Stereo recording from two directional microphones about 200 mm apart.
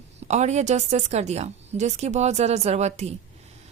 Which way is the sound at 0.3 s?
35° right (ahead or behind).